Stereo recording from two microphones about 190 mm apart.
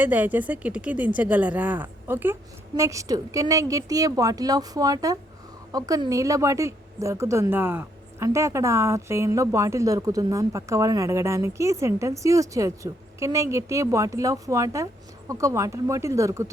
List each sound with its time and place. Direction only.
0.0 s a woman's voice: 10° right (ahead or behind)